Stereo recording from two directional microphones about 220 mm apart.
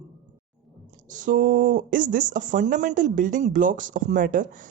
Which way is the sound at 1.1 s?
35° right (ahead or behind).